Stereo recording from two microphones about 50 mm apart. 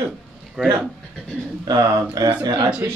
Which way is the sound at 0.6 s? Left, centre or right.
Centre.